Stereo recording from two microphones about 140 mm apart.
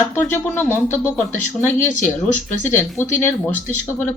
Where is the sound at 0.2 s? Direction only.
15° left (ahead or behind).